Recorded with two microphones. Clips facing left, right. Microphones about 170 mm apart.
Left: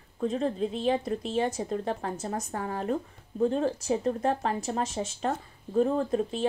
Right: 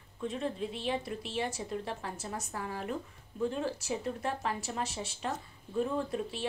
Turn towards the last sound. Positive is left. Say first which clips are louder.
# left 7 dB
turn(degrees=35)  # may be behind; listen again after turning